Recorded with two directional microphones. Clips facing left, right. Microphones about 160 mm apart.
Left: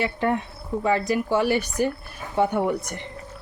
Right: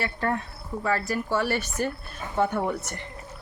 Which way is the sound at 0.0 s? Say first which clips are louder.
Left 4 dB; 20° left (ahead or behind).